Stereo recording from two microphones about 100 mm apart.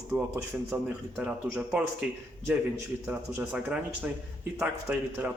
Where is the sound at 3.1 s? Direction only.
10° right (ahead or behind).